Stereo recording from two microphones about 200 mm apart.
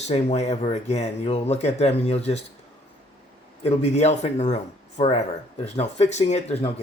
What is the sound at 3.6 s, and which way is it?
Speech, 30° left (ahead or behind).